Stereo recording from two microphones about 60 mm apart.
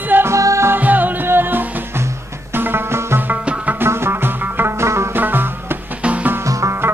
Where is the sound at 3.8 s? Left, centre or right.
Right.